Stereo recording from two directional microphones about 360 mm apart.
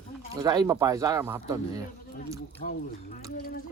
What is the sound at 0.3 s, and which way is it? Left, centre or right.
Speech, centre.